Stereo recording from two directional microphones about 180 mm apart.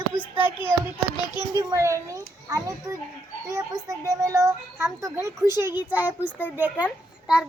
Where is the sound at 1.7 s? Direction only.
15° right (ahead or behind).